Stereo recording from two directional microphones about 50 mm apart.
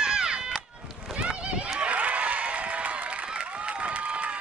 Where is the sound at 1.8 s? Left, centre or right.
Right.